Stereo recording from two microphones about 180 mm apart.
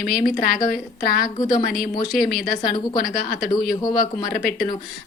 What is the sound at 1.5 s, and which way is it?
A woman's voice, 50° left (ahead or behind).